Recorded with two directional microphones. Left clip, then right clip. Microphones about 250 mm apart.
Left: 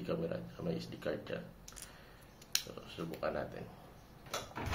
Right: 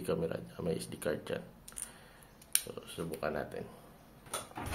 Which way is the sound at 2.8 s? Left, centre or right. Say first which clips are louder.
Right 2 dB; right.